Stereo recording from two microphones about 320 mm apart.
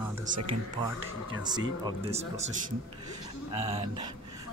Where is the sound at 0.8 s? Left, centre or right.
Centre.